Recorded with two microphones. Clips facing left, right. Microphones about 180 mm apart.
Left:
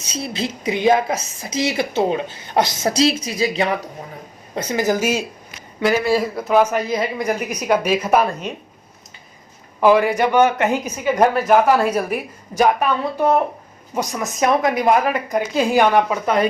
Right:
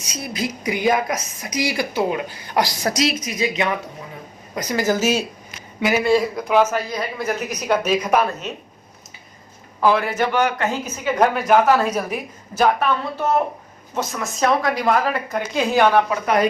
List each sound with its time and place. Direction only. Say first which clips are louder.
0.0 s speech: left 1 dB; 25° left (ahead or behind)
4.5 s speech: left 1 dB; 25° left (ahead or behind); by 8.4 s 5° left (ahead or behind)
9.8 s speech: left 4 dB; 15° left (ahead or behind)